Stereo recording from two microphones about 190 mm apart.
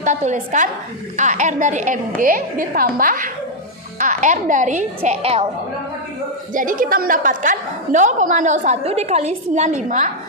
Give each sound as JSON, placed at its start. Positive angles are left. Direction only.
{"t": 0.0, "sound": "a woman's voice", "side_deg": -40}
{"t": 6.5, "sound": "a woman's voice", "side_deg": -45}